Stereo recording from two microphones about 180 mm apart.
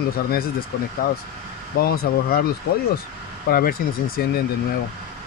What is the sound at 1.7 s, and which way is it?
Speech, 55° left (ahead or behind).